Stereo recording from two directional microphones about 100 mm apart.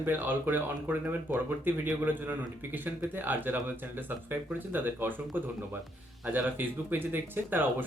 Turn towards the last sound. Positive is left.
turn(degrees=-20)  # may be behind; listen again after turning